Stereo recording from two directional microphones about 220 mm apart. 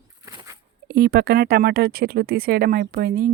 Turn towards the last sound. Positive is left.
turn(degrees=-45)  # may be behind; listen again after turning